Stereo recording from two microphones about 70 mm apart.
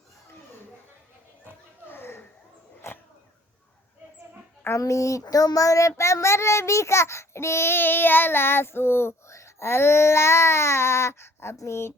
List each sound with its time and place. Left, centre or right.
1.9 s children playing: left
2.8 s dog: left
4.8 s speech: left
5.2 s child singing: left
6.0 s a child's voice: left